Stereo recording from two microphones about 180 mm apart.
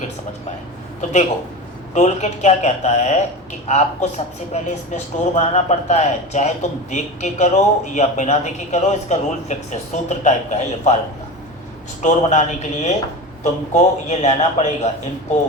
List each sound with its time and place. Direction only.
1.9 s a man's voice: 40° left (ahead or behind)
12.0 s a man's voice: 40° left (ahead or behind)